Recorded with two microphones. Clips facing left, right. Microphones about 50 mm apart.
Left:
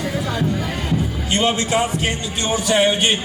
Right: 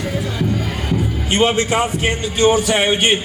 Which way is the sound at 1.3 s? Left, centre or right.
Right.